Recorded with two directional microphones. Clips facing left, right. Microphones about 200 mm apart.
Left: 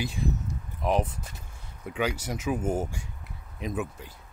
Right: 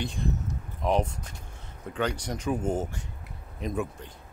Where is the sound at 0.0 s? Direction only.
5° left (ahead or behind).